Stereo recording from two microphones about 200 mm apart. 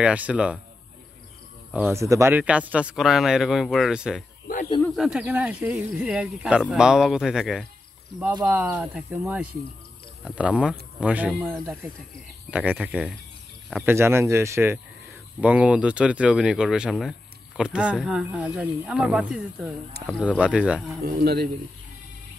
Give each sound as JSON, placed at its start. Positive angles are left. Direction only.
{"t": 0.0, "sound": "speech", "side_deg": -5}
{"t": 1.7, "sound": "speech", "side_deg": -10}
{"t": 21.0, "sound": "a man's voice", "side_deg": -50}